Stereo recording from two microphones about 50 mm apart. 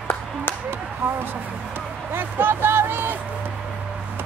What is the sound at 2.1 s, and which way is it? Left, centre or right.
Speech, right.